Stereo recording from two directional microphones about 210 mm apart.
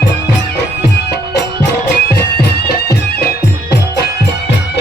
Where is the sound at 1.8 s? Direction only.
50° left (ahead or behind).